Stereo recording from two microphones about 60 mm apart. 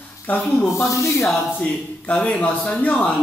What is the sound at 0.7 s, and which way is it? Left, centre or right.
Speech, left.